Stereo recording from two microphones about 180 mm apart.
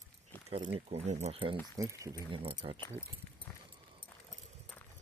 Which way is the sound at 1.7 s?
20° right (ahead or behind).